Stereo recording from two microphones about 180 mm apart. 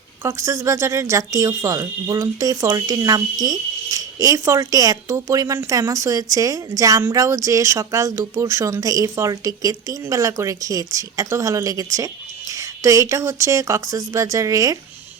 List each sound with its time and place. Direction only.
0.2 s speech: 15° right (ahead or behind)